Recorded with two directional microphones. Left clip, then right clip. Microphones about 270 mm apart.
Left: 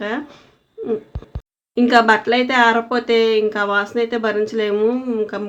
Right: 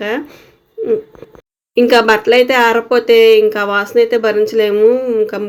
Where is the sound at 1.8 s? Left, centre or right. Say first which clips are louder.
Right 4 dB; centre.